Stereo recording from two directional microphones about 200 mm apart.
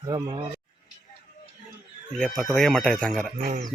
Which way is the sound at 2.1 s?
Centre (ahead or behind).